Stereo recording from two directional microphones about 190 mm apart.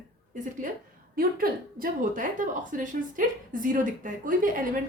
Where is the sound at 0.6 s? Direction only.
45° right (ahead or behind).